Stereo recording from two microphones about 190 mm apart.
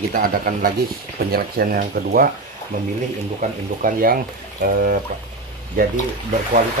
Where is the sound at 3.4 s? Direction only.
45° right (ahead or behind).